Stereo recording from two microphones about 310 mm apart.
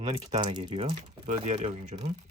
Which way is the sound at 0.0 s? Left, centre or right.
Centre.